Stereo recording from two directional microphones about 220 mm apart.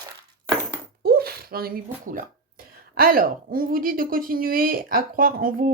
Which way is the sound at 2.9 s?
40° right (ahead or behind).